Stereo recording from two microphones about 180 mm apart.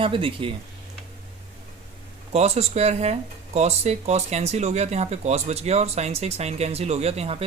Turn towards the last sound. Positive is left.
turn(degrees=-35)  # may be behind; listen again after turning